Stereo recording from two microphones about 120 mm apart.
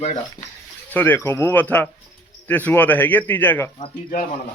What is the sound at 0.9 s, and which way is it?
A man's voice, 15° left (ahead or behind).